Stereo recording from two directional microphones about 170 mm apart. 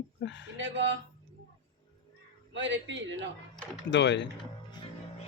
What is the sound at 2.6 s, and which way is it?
Speech, 90° right.